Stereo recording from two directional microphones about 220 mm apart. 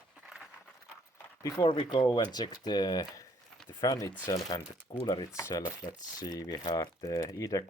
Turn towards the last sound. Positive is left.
turn(degrees=15)  # may be behind; listen again after turning